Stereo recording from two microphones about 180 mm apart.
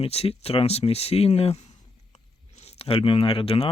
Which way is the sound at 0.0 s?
35° left (ahead or behind).